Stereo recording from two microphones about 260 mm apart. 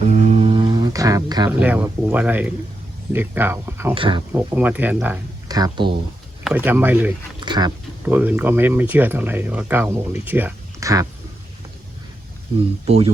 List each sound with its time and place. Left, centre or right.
0.0 s a sound: right; by 2.5 s centre
3.1 s speech: centre
3.9 s speech: centre
4.3 s speech: centre
6.4 s speech: centre
12.8 s speech: right